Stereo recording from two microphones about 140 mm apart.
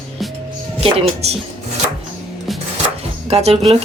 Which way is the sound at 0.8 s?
45° right (ahead or behind).